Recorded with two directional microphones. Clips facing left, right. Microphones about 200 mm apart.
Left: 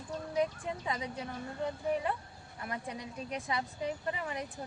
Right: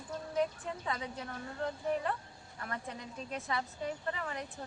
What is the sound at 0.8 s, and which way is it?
A woman's voice, 15° left (ahead or behind).